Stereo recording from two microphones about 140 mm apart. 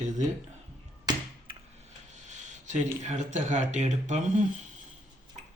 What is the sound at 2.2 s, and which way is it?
Speech, 60° right (ahead or behind).